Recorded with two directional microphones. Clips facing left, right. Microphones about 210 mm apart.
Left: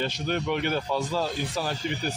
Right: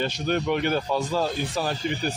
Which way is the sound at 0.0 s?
45° right (ahead or behind).